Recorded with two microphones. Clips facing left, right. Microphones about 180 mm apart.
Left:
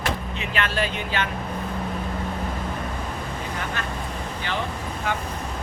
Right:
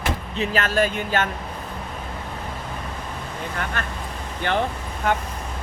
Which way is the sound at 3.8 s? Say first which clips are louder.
Even; 55° right (ahead or behind).